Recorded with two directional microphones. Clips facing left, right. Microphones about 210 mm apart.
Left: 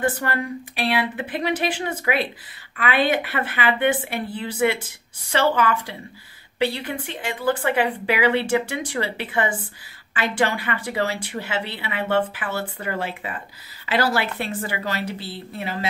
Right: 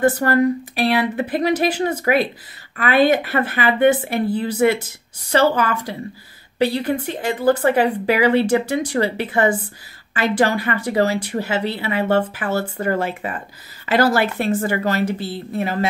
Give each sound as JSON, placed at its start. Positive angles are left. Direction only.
{"t": 0.0, "sound": "a woman's voice", "side_deg": -40}